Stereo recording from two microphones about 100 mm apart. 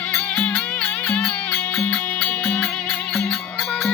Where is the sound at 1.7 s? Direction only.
20° left (ahead or behind).